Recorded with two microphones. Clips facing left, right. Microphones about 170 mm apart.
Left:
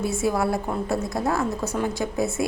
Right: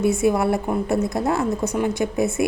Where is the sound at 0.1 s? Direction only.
20° right (ahead or behind).